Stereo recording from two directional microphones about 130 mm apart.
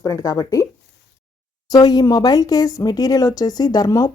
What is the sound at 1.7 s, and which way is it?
Speech, 30° left (ahead or behind).